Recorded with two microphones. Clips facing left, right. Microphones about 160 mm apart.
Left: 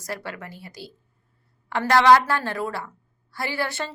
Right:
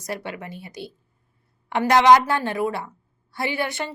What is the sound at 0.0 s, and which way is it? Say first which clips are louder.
A woman's voice: right 2 dB; 20° right (ahead or behind).